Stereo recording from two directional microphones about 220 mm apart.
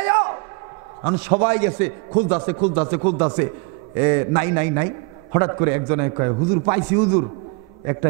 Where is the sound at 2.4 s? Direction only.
30° right (ahead or behind).